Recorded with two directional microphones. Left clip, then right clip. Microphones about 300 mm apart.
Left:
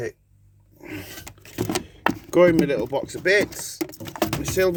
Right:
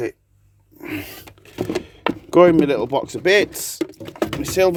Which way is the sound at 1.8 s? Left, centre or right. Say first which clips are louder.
Right 1 dB; centre.